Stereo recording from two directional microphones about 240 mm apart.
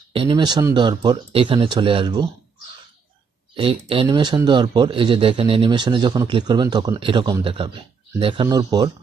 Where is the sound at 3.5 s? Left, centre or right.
Right.